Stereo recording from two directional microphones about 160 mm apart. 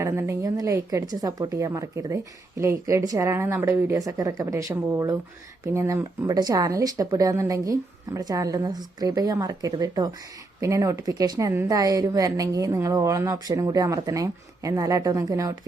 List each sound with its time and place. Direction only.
0.0 s a woman's voice: 20° right (ahead or behind)